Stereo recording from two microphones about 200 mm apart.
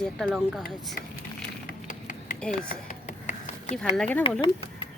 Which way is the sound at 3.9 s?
10° left (ahead or behind).